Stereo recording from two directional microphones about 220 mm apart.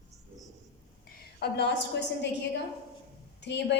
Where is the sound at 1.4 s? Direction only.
50° left (ahead or behind).